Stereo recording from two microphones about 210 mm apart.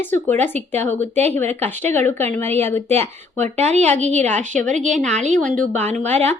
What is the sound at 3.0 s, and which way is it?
A woman's voice, 30° right (ahead or behind).